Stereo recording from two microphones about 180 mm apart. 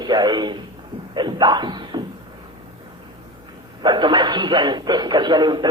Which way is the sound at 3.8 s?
25° right (ahead or behind).